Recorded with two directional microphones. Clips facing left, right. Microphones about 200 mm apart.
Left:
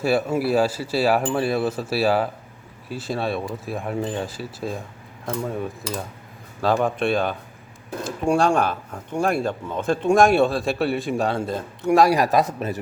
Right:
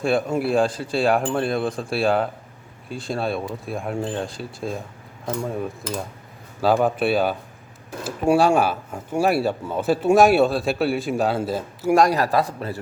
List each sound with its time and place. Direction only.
0.0 s speech: 5° left (ahead or behind)
12.1 s a man's voice: 15° left (ahead or behind)